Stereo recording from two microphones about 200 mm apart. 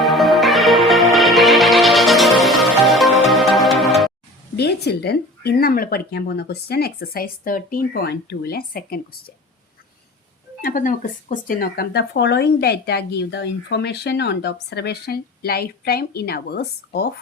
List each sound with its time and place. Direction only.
0.0 s music: centre (ahead or behind)
4.5 s speech: 55° left (ahead or behind)
10.6 s speech: 45° left (ahead or behind)